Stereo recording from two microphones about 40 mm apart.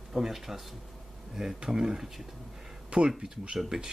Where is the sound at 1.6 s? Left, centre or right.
Centre.